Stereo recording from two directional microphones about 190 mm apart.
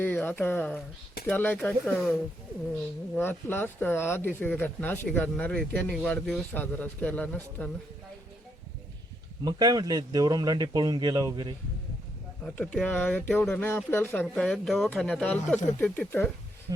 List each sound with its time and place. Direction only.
0.0 s speech: 10° left (ahead or behind)
3.2 s speech: 10° left (ahead or behind)
9.4 s speech: 20° right (ahead or behind)
12.4 s speech: 5° left (ahead or behind)
16.7 s speech: 20° right (ahead or behind)